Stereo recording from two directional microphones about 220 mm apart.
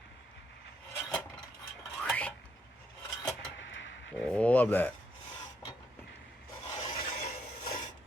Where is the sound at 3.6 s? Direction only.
55° left (ahead or behind).